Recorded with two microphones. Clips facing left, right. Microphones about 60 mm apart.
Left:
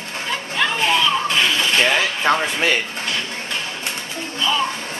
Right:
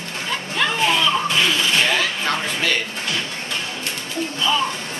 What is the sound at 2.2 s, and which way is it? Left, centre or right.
Music, left.